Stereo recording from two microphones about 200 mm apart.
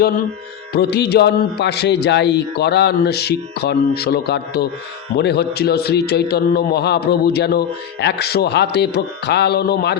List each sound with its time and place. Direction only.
0.7 s a man's voice: 55° left (ahead or behind)